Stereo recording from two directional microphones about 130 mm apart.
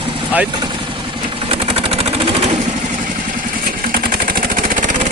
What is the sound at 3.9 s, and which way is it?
Vehicle, 90° right.